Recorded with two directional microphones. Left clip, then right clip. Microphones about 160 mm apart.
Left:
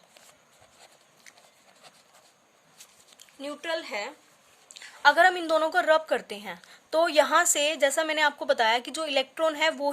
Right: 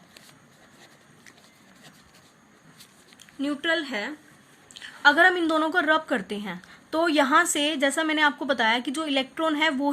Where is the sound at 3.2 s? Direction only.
35° left (ahead or behind).